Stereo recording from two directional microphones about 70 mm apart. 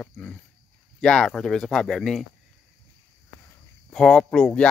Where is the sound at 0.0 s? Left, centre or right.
Left.